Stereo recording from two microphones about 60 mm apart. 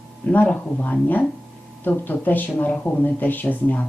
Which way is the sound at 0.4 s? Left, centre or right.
Left.